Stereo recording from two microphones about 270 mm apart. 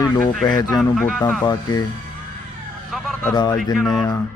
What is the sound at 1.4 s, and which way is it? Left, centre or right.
Speech, centre.